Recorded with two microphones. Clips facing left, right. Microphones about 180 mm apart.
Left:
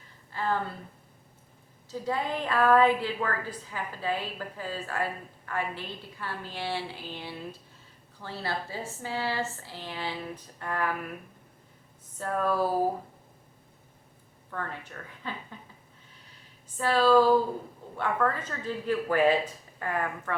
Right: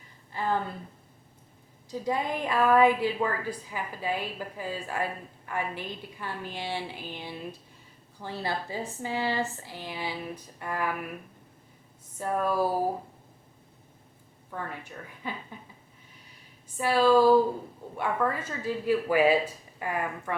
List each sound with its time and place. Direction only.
0.3 s a woman's voice: 15° right (ahead or behind)
1.9 s a woman's voice: 15° right (ahead or behind)
12.1 s a woman's voice: 15° right (ahead or behind)
14.5 s a woman's voice: 15° right (ahead or behind)
16.7 s a woman's voice: 15° right (ahead or behind)